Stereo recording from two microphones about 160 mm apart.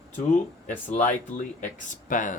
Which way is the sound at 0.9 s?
50° left (ahead or behind).